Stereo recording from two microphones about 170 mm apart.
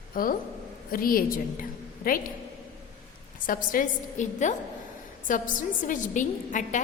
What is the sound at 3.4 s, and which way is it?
A woman's voice, 55° left (ahead or behind).